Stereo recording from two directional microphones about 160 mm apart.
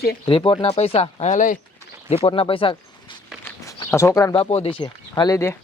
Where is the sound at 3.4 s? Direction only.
20° left (ahead or behind).